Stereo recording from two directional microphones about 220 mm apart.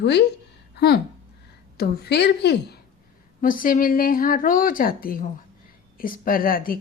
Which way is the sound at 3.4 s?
40° left (ahead or behind).